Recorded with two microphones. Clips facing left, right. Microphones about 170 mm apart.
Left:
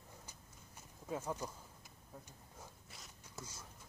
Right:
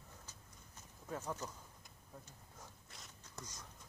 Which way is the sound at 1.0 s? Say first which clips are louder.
Left 2 dB; 10° left (ahead or behind).